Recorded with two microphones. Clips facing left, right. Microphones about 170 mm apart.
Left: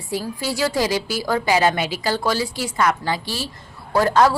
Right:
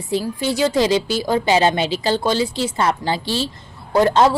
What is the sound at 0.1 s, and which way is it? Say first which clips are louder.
A woman's voice: right 4 dB; 20° right (ahead or behind).